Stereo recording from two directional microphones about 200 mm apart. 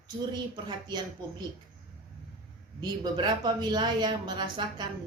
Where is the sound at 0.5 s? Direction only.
20° right (ahead or behind).